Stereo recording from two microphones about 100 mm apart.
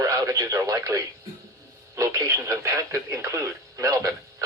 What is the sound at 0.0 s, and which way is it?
Speech, 35° right (ahead or behind).